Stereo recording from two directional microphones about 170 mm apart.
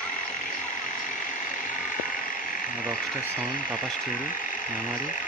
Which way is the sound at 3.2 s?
60° left (ahead or behind).